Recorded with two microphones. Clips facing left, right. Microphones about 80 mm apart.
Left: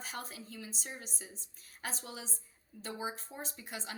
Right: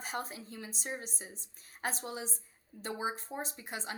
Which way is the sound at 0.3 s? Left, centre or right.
Right.